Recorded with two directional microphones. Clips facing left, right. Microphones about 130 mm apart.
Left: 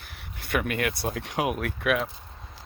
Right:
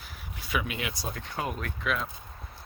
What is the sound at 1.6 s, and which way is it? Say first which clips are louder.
Speech: left 6 dB; 70° left (ahead or behind).